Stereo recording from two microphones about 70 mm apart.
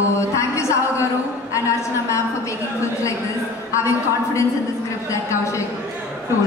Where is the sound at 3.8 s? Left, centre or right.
Left.